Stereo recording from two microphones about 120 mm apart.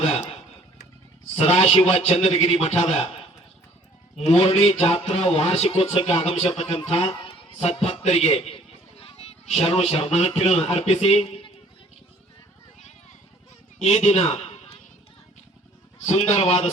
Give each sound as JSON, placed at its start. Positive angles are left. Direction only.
{"t": 1.4, "sound": "speech", "side_deg": 55}
{"t": 4.6, "sound": "a man's voice", "side_deg": 55}
{"t": 13.7, "sound": "a man's voice", "side_deg": 65}
{"t": 16.0, "sound": "speech", "side_deg": 60}